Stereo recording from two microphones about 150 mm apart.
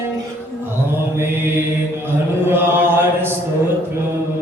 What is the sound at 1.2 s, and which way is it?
Mantra, 15° right (ahead or behind).